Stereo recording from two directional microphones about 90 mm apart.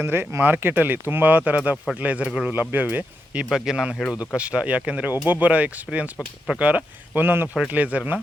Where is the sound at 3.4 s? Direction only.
5° right (ahead or behind).